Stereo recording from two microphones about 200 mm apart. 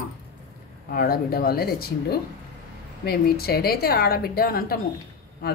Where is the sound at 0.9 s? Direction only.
45° left (ahead or behind).